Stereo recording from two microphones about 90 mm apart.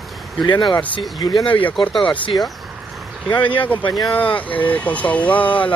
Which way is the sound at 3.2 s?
60° left (ahead or behind).